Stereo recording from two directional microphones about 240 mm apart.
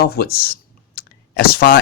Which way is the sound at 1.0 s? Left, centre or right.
Left.